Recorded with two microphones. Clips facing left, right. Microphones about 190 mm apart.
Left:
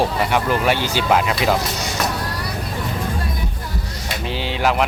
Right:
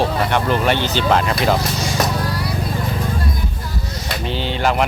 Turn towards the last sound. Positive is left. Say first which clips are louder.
# right 1 dB
turn(degrees=5)  # may be behind; listen again after turning